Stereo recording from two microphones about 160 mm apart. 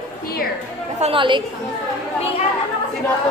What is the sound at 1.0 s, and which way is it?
Speech, 35° right (ahead or behind).